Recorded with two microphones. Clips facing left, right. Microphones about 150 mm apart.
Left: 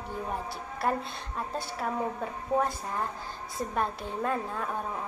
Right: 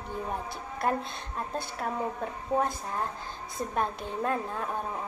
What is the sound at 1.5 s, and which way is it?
A woman's voice, 5° left (ahead or behind).